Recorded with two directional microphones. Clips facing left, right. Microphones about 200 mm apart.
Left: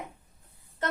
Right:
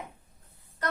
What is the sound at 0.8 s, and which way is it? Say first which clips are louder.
Music: left 1 dB; 25° left (ahead or behind).